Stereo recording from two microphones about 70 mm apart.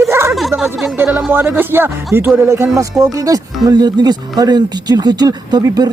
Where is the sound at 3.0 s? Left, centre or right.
Right.